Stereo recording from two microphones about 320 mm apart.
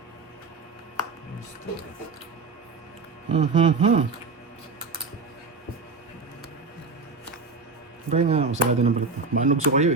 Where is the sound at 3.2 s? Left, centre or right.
Right.